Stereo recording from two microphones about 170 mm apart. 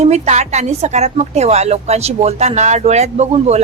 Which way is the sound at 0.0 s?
40° right (ahead or behind).